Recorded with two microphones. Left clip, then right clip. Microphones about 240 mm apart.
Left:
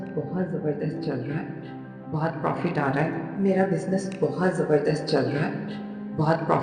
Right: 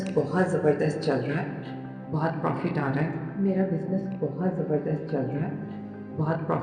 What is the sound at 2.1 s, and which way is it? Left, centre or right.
Speech, centre.